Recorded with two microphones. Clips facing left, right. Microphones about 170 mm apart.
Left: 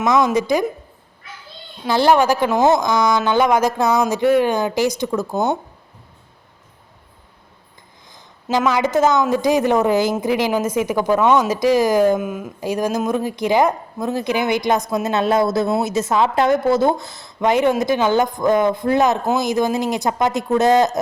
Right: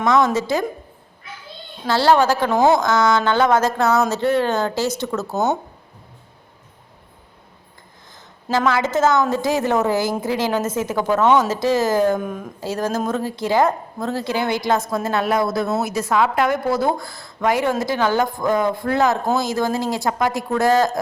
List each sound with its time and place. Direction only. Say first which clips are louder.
0.3 s a woman's voice: left 3 dB; 15° left (ahead or behind)
1.9 s a woman's voice: left 1 dB; 15° left (ahead or behind)
8.4 s a woman's voice: left 1 dB; 15° left (ahead or behind)